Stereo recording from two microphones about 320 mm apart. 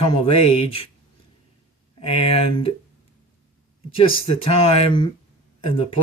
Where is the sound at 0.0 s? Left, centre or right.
Centre.